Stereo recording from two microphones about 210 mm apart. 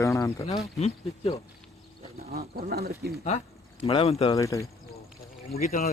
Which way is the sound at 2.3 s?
45° right (ahead or behind).